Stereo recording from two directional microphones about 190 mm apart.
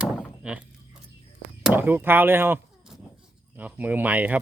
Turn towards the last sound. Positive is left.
turn(degrees=-10)  # may be behind; listen again after turning